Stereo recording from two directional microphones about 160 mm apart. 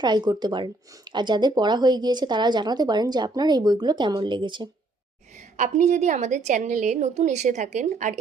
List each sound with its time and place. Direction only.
0.0 s speech: 25° right (ahead or behind)
5.5 s a woman's voice: 50° right (ahead or behind)